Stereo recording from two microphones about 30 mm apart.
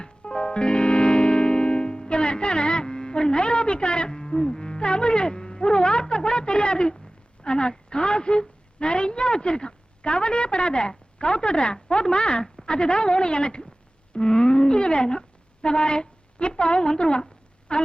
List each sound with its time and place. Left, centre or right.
0.0 s music: left
7.4 s a woman's voice: left